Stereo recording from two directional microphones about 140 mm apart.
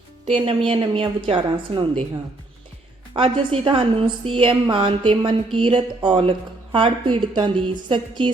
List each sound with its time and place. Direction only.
0.3 s a woman's voice: 45° right (ahead or behind)
3.2 s a woman's voice: 40° right (ahead or behind)